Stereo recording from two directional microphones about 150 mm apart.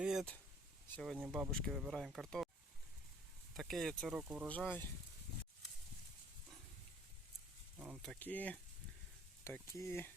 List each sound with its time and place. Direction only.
0.0 s a sound: 5° right (ahead or behind)
1.2 s speech: 5° right (ahead or behind)
3.6 s speech: centre (ahead or behind)
4.4 s speech: 10° left (ahead or behind)
7.8 s a sound: 10° right (ahead or behind)
8.0 s speech: 10° left (ahead or behind)